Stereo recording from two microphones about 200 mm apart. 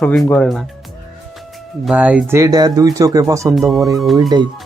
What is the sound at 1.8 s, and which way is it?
Speech, 5° right (ahead or behind).